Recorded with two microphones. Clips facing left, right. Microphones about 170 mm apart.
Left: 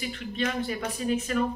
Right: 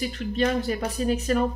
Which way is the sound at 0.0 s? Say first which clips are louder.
Right 5 dB; 40° right (ahead or behind).